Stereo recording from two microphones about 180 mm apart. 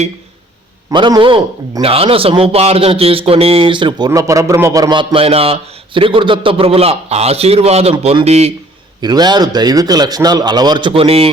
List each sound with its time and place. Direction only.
0.9 s a man's voice: 25° right (ahead or behind)
9.0 s a man's voice: 25° right (ahead or behind)